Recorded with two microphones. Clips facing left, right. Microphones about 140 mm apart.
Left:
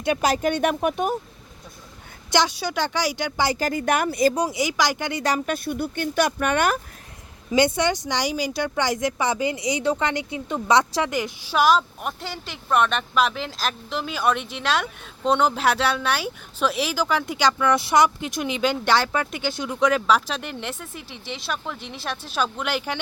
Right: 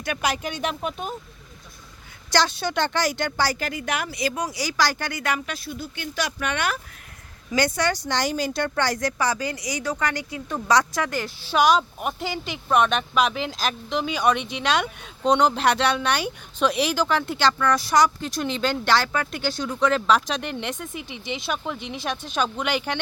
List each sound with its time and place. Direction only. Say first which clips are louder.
0.2 s speech: left 5 dB; 40° left (ahead or behind)
0.5 s speech: left 6 dB; 55° left (ahead or behind)
2.3 s speech: even; 15° left (ahead or behind)
3.6 s speech: left 6 dB; 45° left (ahead or behind)
4.4 s speech: left 2 dB; 25° left (ahead or behind)
5.2 s speech: left 4 dB; 35° left (ahead or behind)
5.5 s speech: left 7 dB; 55° left (ahead or behind)
7.5 s speech: left 3 dB; 20° left (ahead or behind)
11.5 s speech: even; centre (ahead or behind)
17.7 s speech: left 1 dB; 25° left (ahead or behind); by 23.0 s 5° left (ahead or behind)